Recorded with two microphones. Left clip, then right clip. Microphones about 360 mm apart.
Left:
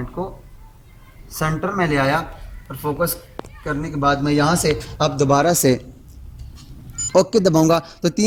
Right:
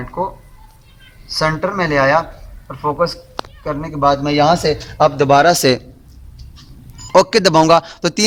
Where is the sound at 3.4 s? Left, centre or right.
Right.